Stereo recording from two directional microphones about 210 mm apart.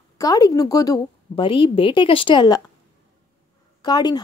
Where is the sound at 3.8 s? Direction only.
20° left (ahead or behind).